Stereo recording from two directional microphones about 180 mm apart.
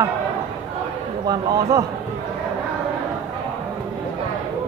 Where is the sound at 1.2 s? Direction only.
20° right (ahead or behind).